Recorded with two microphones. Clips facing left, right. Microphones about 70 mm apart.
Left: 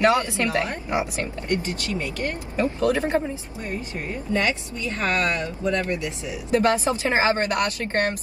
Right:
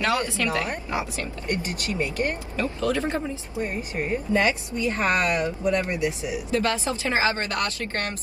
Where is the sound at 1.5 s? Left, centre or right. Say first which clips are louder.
Left 2 dB; right.